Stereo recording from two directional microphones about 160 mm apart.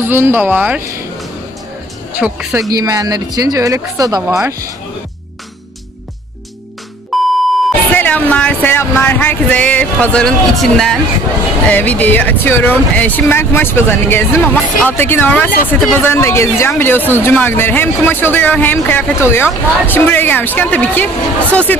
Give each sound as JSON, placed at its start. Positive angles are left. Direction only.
{"t": 0.0, "sound": "speech", "side_deg": -15}
{"t": 2.1, "sound": "speech", "side_deg": -10}
{"t": 2.8, "sound": "speech", "side_deg": -25}
{"t": 7.1, "sound": "beep", "side_deg": 0}
{"t": 7.9, "sound": "a man's voice", "side_deg": 10}